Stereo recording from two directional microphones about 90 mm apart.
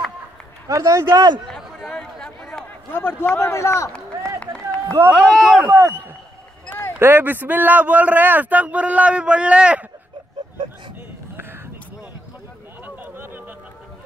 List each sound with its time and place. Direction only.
0.7 s a man's voice: 35° right (ahead or behind)
1.6 s chatter: 5° left (ahead or behind)
2.9 s a man's voice: 25° left (ahead or behind)
4.4 s a sound: 15° left (ahead or behind)
5.1 s speech: 5° right (ahead or behind)
5.7 s speech: 25° right (ahead or behind)
7.0 s a man's voice: 25° right (ahead or behind)
12.8 s a sound: 20° right (ahead or behind)